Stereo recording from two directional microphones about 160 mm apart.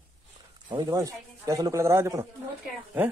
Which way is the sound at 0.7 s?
25° right (ahead or behind).